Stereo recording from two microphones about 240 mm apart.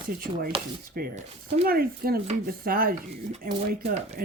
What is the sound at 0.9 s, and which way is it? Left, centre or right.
Speech, right.